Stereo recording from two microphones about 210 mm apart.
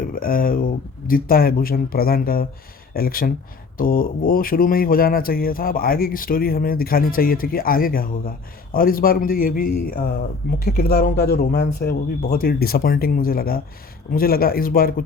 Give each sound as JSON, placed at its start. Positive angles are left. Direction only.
{"t": 0.1, "sound": "speech", "side_deg": 45}